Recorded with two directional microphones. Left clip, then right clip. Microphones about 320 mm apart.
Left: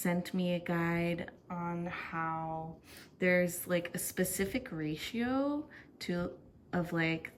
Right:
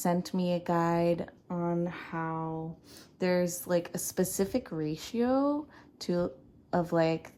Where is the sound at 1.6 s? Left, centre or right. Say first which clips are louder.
Right 8 dB; left.